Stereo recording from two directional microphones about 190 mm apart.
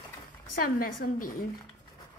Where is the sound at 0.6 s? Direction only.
50° left (ahead or behind).